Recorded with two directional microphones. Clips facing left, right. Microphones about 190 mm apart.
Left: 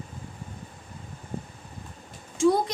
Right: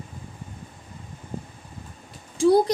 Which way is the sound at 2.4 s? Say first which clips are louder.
Right 4 dB; 35° right (ahead or behind).